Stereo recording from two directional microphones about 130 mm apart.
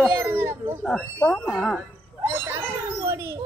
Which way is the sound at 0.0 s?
15° right (ahead or behind).